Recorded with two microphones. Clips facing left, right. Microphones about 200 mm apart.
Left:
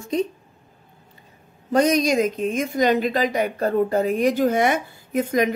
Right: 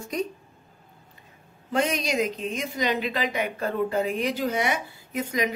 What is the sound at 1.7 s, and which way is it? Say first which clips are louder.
A woman's voice: left 7 dB; 45° left (ahead or behind).